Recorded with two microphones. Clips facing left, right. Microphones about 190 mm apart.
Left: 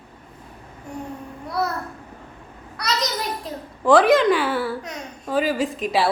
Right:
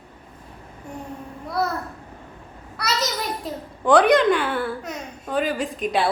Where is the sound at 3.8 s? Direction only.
Centre (ahead or behind).